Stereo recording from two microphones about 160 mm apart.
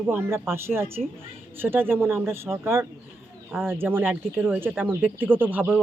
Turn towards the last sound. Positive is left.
turn(degrees=-10)  # may be behind; listen again after turning